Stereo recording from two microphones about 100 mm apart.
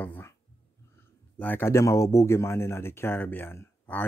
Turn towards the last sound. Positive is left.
turn(degrees=20)  # may be behind; listen again after turning